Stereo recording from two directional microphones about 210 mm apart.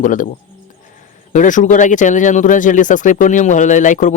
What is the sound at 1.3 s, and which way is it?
Speech, 35° left (ahead or behind).